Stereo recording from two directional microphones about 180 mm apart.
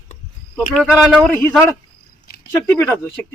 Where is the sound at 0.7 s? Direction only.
Centre (ahead or behind).